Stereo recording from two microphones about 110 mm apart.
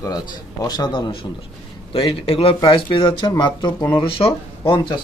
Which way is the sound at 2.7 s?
50° left (ahead or behind).